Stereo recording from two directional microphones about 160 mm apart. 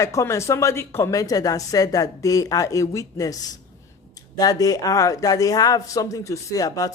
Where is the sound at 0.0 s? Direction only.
20° left (ahead or behind).